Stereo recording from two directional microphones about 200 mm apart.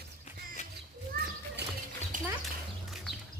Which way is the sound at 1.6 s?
60° right (ahead or behind).